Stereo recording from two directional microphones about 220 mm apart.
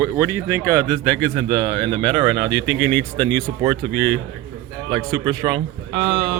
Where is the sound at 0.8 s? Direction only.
20° right (ahead or behind).